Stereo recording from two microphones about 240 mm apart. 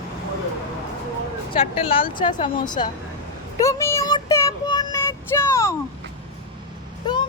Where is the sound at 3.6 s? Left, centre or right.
Centre.